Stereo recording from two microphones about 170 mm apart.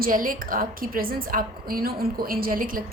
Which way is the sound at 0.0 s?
55° right (ahead or behind).